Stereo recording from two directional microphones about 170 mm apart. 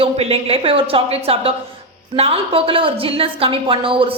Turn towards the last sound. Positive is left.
turn(degrees=-30)  # may be behind; listen again after turning